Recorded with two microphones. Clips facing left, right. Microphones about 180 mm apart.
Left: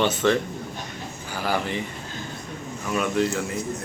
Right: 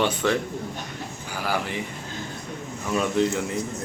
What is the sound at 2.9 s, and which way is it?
Speech, 25° right (ahead or behind).